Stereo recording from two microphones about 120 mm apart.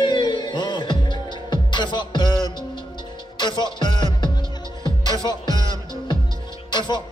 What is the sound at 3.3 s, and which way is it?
Music, 40° left (ahead or behind).